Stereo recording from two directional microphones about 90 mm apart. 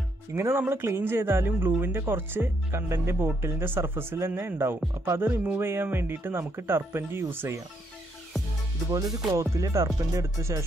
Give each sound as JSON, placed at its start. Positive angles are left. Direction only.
{"t": 0.3, "sound": "speech", "side_deg": -25}
{"t": 5.3, "sound": "speech", "side_deg": -15}
{"t": 9.3, "sound": "music", "side_deg": -35}